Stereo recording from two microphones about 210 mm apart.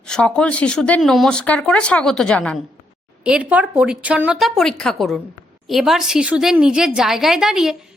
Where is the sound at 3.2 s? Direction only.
5° right (ahead or behind).